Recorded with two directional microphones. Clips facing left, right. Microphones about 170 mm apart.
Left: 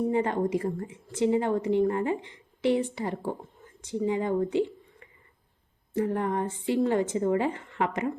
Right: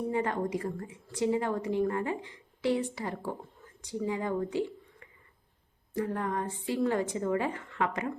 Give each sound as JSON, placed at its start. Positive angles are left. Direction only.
{"t": 0.1, "sound": "a woman's voice", "side_deg": 25}